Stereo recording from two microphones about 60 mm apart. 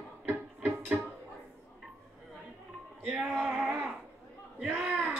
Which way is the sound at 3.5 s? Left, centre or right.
Right.